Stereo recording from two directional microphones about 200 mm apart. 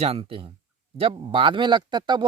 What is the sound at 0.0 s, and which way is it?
Speech, 30° right (ahead or behind).